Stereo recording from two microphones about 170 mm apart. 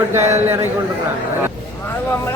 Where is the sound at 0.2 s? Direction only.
40° right (ahead or behind).